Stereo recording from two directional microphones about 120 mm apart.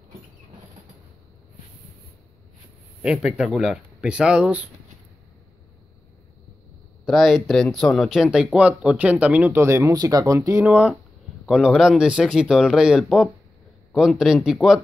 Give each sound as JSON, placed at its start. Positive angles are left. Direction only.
{"t": 3.0, "sound": "speech", "side_deg": -5}
{"t": 7.1, "sound": "speech", "side_deg": 0}
{"t": 10.6, "sound": "speech", "side_deg": -10}